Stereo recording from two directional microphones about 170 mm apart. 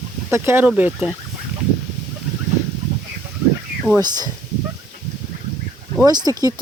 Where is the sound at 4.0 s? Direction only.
25° right (ahead or behind).